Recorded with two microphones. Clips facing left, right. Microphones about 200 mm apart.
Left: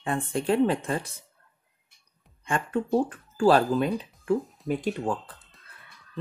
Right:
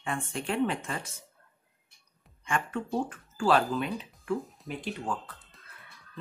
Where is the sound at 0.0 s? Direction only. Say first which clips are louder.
Left 6 dB; 35° left (ahead or behind).